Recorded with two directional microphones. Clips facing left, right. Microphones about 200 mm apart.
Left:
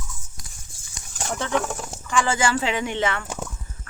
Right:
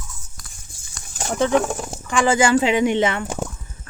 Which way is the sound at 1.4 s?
15° right (ahead or behind).